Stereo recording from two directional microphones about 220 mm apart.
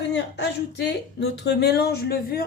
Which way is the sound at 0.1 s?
50° left (ahead or behind).